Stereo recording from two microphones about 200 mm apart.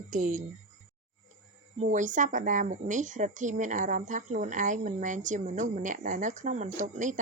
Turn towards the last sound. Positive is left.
turn(degrees=-40)  # may be behind; listen again after turning